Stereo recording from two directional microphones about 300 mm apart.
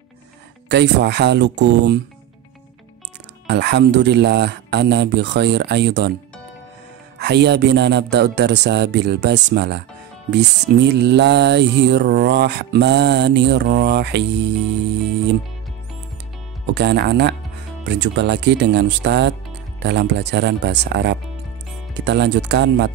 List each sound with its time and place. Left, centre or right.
0.7 s music: right
3.4 s music: right
7.2 s music: right
16.7 s music: right